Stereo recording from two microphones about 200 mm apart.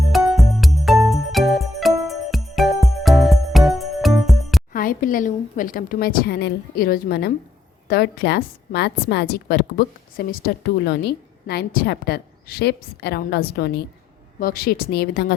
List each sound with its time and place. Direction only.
0.1 s music: centre (ahead or behind)
4.7 s a woman's voice: 45° left (ahead or behind)